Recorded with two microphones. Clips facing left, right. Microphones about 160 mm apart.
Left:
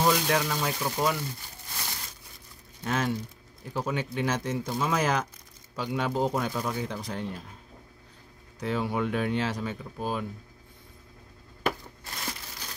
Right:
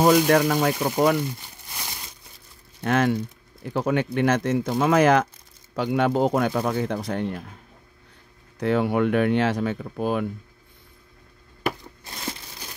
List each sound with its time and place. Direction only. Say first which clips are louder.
0.0 s speech: right 8 dB; 55° right (ahead or behind)
2.8 s speech: right 7 dB; 65° right (ahead or behind)
8.5 s speech: right 7 dB; 65° right (ahead or behind)